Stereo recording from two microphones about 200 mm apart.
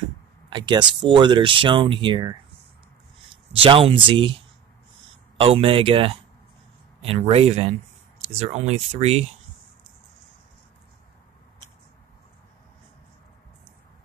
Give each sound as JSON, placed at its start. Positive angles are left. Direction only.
{"t": 0.5, "sound": "speech", "side_deg": -20}
{"t": 3.5, "sound": "speech", "side_deg": -25}
{"t": 5.4, "sound": "speech", "side_deg": -25}